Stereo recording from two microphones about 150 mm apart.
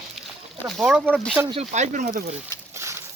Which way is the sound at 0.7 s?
5° right (ahead or behind).